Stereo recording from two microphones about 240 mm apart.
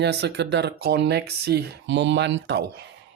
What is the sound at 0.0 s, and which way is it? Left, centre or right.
Speech, right.